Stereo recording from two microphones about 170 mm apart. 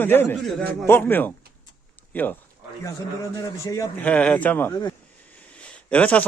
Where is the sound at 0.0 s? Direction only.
10° left (ahead or behind).